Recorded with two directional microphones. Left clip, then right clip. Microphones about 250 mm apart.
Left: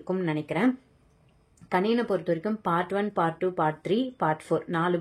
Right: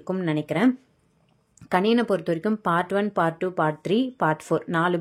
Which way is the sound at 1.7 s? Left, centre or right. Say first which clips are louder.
Right 4 dB; right.